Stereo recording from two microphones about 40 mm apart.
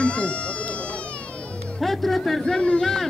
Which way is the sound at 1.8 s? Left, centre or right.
Centre.